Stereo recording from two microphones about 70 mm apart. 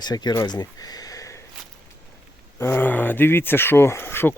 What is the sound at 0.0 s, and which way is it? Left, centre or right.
Speech, left.